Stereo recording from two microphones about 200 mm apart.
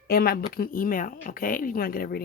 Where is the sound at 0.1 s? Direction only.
50° left (ahead or behind).